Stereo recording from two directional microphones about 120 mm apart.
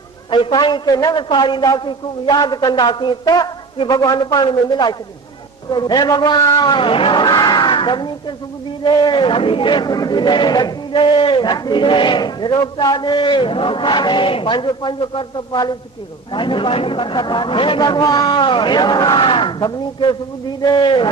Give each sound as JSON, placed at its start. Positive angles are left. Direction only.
{"t": 0.3, "sound": "speech", "side_deg": 40}